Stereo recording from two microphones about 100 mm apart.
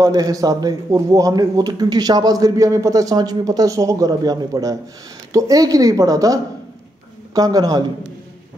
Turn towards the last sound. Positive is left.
turn(degrees=-40)  # may be behind; listen again after turning